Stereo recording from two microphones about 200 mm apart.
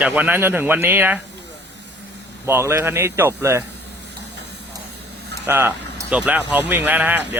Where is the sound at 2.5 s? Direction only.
10° right (ahead or behind).